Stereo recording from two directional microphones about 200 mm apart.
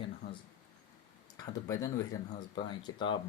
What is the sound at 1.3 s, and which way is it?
Speech, 20° left (ahead or behind).